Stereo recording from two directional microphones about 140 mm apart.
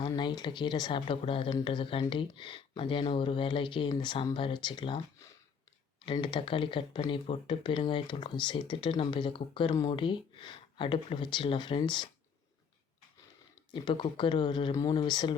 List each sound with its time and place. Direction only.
0.0 s speech: 30° left (ahead or behind)
6.1 s speech: 35° left (ahead or behind)
13.7 s speech: 35° left (ahead or behind)